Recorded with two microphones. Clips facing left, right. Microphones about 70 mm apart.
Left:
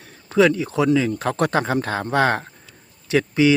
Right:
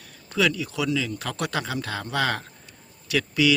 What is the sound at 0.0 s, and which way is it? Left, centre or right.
A man's voice, left.